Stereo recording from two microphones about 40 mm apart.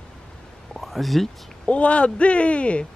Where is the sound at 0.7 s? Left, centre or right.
Centre.